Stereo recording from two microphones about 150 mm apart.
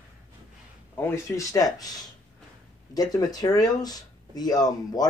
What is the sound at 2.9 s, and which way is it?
Speech, 25° left (ahead or behind).